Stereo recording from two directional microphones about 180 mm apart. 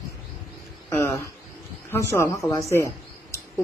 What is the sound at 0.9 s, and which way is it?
Speech, 15° left (ahead or behind).